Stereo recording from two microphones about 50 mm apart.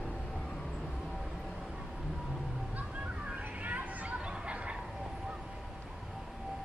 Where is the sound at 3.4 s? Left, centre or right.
Right.